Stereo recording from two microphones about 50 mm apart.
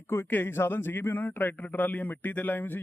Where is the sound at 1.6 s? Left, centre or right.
Left.